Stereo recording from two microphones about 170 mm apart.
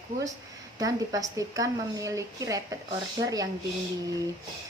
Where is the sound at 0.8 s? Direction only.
20° right (ahead or behind).